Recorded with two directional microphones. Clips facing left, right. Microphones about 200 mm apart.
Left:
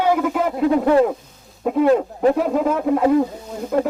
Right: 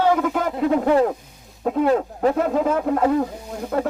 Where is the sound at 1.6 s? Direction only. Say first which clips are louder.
Left 3 dB; centre (ahead or behind).